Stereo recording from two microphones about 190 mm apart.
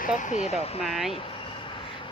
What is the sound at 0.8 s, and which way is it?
Speech, centre (ahead or behind).